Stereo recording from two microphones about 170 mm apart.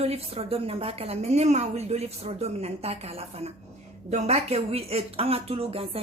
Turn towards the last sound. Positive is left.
turn(degrees=-35)  # may be behind; listen again after turning